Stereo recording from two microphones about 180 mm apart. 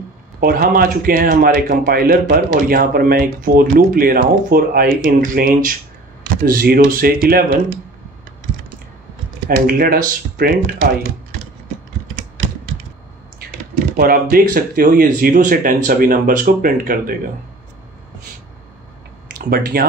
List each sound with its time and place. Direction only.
0.4 s speech: 55° right (ahead or behind)
9.7 s speech: 55° right (ahead or behind)
13.9 s speech: 55° right (ahead or behind)
19.3 s speech: 55° right (ahead or behind)